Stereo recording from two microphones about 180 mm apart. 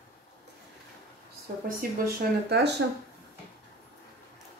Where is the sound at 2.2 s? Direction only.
60° right (ahead or behind).